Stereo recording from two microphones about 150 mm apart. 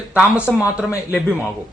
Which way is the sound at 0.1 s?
5° right (ahead or behind).